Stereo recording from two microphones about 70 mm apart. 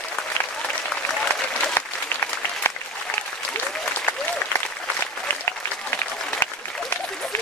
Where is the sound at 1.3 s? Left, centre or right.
Left.